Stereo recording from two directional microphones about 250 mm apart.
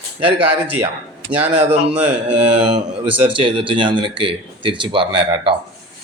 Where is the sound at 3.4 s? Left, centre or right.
Right.